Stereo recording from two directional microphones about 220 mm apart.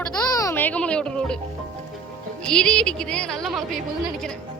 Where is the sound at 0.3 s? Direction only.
15° left (ahead or behind).